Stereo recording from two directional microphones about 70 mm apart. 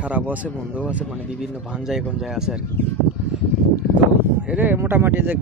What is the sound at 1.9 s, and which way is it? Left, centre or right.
Speech, centre.